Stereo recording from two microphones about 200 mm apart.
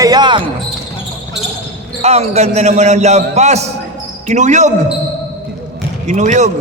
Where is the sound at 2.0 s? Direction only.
35° right (ahead or behind).